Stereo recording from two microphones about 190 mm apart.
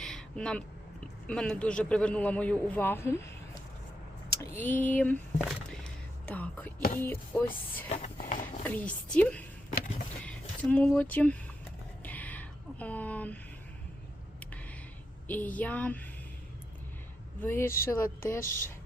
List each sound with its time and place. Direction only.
0.0 s vehicle: 5° left (ahead or behind)
1.3 s a man's voice: 5° left (ahead or behind)
5.4 s whispering: centre (ahead or behind)
7.0 s a man's voice: 10° left (ahead or behind)
7.9 s a sound: 40° left (ahead or behind)
8.6 s a man's voice: 10° left (ahead or behind)
12.0 s music: 10° left (ahead or behind)
14.3 s a sound: 5° left (ahead or behind)
15.3 s a man's voice: 10° left (ahead or behind)
17.4 s a man's voice: 10° left (ahead or behind)